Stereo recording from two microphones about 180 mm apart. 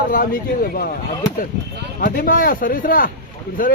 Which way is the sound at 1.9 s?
55° left (ahead or behind).